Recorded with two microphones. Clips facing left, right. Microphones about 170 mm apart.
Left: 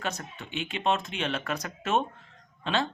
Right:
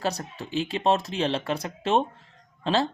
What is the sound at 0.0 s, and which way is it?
Speech, 35° right (ahead or behind).